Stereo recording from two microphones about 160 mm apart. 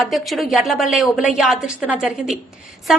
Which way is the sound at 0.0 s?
Centre (ahead or behind).